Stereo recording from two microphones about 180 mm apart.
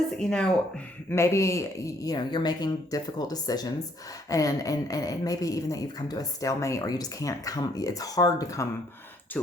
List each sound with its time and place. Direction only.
0.2 s speech: 5° left (ahead or behind)
1.1 s a woman's voice: 15° left (ahead or behind)